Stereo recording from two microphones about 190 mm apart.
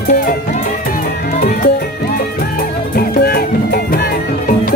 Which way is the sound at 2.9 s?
50° left (ahead or behind).